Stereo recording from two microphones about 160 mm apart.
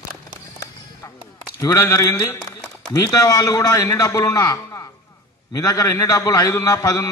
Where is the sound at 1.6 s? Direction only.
20° left (ahead or behind).